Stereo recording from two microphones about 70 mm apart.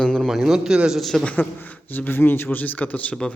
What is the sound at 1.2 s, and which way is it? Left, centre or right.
Speech, left.